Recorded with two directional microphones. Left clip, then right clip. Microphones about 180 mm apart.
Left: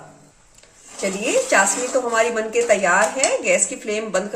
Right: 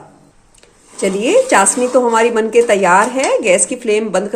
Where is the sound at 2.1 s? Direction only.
50° right (ahead or behind).